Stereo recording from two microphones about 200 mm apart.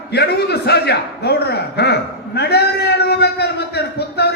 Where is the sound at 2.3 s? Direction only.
55° left (ahead or behind).